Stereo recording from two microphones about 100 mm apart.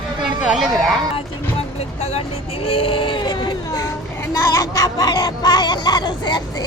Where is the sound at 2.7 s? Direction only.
70° left (ahead or behind); by 3.8 s 50° left (ahead or behind).